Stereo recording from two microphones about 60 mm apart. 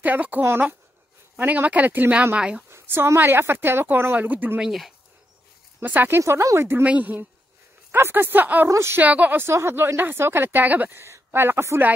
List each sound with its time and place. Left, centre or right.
0.0 s speech: right
2.3 s speech: centre
2.7 s speech: right
4.6 s speech: centre
5.8 s speech: right
6.2 s speech: right
6.8 s speech: right
7.9 s speech: right
8.6 s speech: right
9.0 s speech: right
9.4 s speech: right